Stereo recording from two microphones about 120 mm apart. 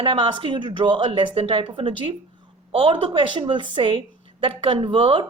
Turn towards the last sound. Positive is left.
turn(degrees=-45)  # may be behind; listen again after turning